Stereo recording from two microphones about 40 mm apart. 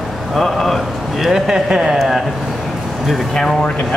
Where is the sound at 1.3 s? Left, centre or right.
Centre.